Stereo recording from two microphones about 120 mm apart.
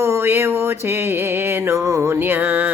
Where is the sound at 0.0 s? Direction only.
20° right (ahead or behind).